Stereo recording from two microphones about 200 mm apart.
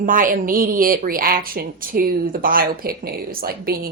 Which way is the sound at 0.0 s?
40° right (ahead or behind).